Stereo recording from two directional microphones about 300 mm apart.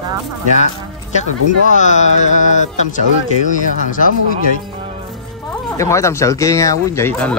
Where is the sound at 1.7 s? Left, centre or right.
Left.